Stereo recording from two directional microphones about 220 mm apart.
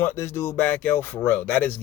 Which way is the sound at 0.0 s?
10° left (ahead or behind).